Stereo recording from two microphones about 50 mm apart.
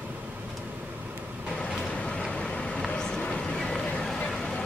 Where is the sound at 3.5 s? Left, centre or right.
Centre.